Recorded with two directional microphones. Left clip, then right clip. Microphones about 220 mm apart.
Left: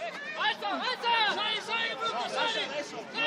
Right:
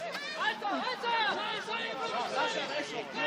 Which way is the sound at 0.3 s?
25° left (ahead or behind).